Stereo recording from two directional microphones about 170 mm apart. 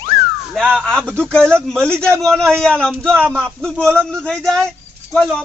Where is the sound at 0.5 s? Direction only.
5° right (ahead or behind).